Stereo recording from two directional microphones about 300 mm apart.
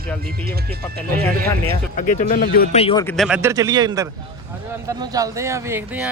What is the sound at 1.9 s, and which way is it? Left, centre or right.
Speech, left.